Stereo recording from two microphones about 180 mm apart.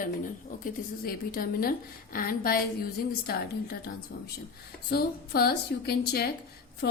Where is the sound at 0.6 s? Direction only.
55° left (ahead or behind).